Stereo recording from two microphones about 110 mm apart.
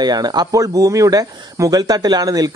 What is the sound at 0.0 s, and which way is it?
Speech, 40° right (ahead or behind).